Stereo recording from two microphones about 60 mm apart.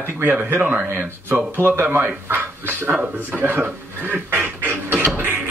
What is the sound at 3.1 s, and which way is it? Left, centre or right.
Speech, right.